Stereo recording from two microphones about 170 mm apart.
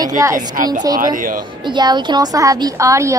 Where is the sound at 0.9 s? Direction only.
55° right (ahead or behind).